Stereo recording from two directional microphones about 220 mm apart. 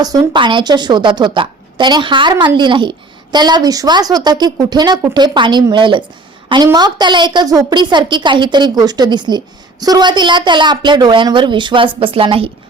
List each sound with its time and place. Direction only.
0.0 s a woman's voice: 15° right (ahead or behind)